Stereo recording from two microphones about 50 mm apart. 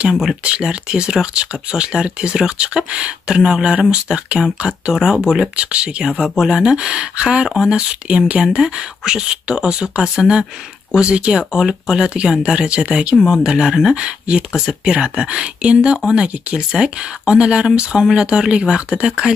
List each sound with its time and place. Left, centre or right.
0.1 s speech: centre
0.4 s speech: right
4.9 s speech: centre
5.6 s speech: right
7.4 s speech: centre
8.0 s speech: right